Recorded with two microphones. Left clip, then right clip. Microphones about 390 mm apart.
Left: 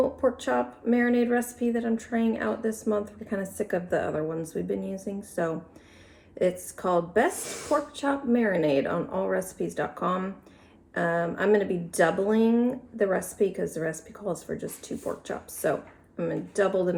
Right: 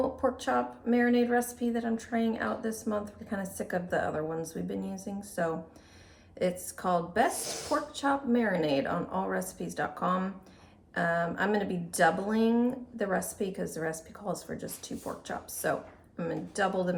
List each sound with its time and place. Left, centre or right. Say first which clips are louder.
0.2 s a woman's voice: left 3 dB; centre